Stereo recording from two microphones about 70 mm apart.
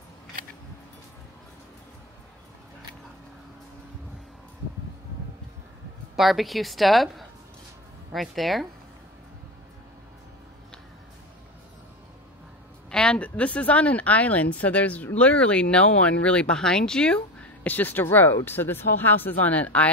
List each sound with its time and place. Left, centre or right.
6.1 s a woman's voice: centre
12.9 s speech: centre
17.6 s speech: left